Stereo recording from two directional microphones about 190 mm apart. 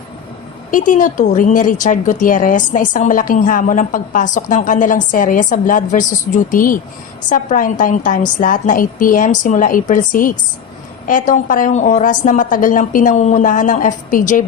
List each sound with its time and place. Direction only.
0.7 s speech: 45° left (ahead or behind)